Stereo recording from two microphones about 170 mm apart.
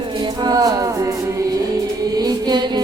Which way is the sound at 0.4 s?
20° right (ahead or behind).